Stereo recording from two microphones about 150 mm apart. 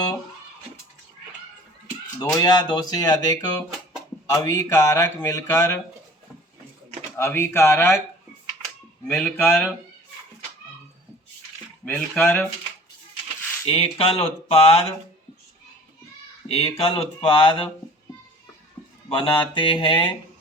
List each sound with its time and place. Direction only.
2.4 s speech: 25° left (ahead or behind)
7.2 s speech: 15° left (ahead or behind)
9.0 s speech: 5° left (ahead or behind)
11.9 s speech: 5° left (ahead or behind)
13.7 s speech: 40° left (ahead or behind)
16.5 s speech: 40° left (ahead or behind)
19.0 s speech: 40° left (ahead or behind)